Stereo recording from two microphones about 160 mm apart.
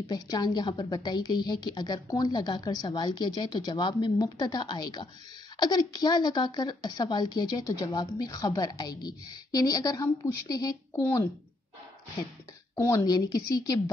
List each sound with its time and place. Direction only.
0.1 s speech: 25° left (ahead or behind)
12.7 s speech: 20° left (ahead or behind)